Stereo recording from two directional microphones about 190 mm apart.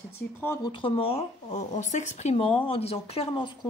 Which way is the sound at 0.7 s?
30° left (ahead or behind).